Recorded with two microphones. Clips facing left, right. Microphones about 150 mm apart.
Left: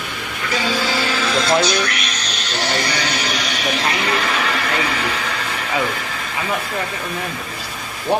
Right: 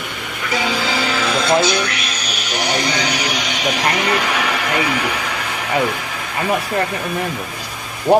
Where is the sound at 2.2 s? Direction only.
10° right (ahead or behind).